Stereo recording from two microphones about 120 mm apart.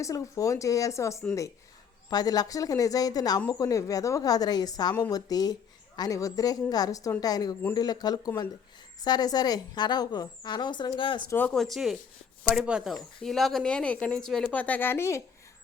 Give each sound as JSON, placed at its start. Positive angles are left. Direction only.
{"t": 0.0, "sound": "a woman's voice", "side_deg": 25}
{"t": 11.3, "sound": "speech", "side_deg": 15}
{"t": 11.5, "sound": "speech", "side_deg": 0}